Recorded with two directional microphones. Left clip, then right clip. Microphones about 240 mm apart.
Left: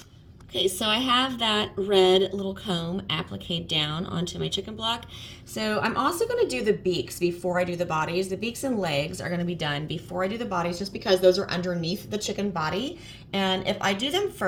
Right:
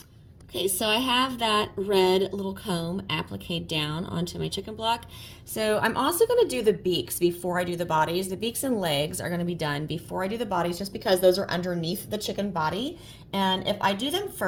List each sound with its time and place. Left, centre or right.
0.5 s a woman's voice: right